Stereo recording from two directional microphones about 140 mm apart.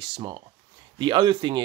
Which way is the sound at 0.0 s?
30° right (ahead or behind).